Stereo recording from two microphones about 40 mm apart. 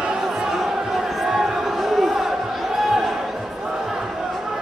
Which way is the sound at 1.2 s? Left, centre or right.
Centre.